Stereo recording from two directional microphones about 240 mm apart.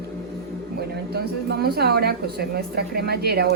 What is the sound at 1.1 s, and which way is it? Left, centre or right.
A woman's voice, right.